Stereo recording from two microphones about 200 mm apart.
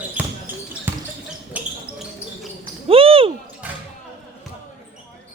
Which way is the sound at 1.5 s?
5° right (ahead or behind).